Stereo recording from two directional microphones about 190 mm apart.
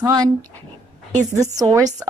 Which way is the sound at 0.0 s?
20° right (ahead or behind).